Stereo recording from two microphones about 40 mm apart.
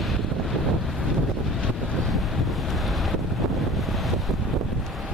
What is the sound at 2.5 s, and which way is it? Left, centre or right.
Wind noise, centre.